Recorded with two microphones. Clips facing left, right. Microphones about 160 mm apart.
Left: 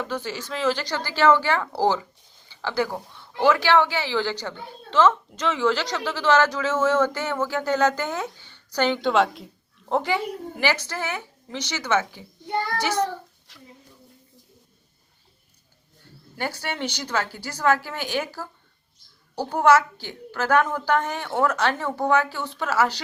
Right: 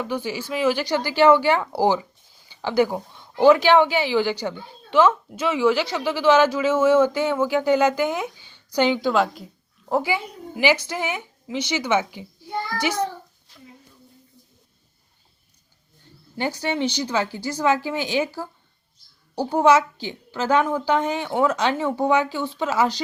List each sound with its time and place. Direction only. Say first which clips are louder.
0.0 s a woman's voice: right 3 dB; 10° right (ahead or behind)
9.0 s a woman's voice: even; centre (ahead or behind)
13.5 s a sound: right 2 dB; 90° left
16.4 s speech: right 5 dB; 15° right (ahead or behind)